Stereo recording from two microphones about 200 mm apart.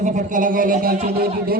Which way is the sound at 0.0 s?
40° right (ahead or behind).